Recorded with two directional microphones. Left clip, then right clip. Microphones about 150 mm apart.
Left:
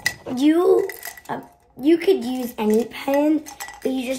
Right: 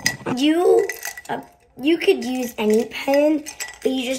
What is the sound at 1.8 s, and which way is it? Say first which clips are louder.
Speech: even; 30° left (ahead or behind).